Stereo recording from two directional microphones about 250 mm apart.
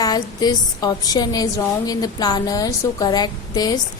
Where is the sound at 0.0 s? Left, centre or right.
Centre.